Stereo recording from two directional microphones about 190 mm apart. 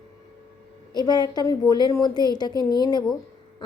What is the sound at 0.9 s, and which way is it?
A woman's voice, 20° left (ahead or behind).